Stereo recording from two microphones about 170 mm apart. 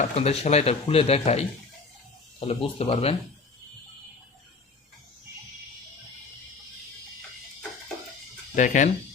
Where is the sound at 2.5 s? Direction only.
35° left (ahead or behind).